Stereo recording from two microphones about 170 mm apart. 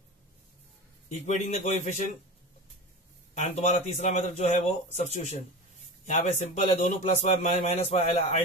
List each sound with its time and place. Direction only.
1.0 s a man's voice: 45° left (ahead or behind)
3.3 s a man's voice: 45° left (ahead or behind)